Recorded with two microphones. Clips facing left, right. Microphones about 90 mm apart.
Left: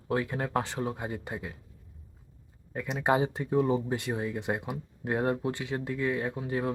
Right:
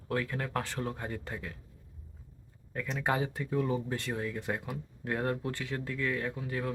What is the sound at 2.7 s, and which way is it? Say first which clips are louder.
Speech: left 5 dB; 20° left (ahead or behind).